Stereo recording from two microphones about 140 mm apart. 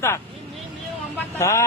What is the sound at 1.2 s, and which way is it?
Speech, 20° left (ahead or behind).